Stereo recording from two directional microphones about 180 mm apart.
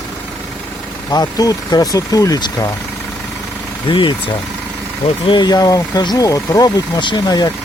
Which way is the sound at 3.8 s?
30° left (ahead or behind).